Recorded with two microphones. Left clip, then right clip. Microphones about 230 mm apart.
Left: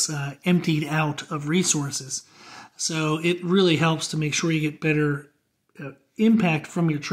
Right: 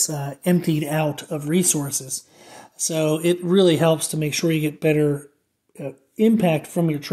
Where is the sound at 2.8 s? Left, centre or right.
Left.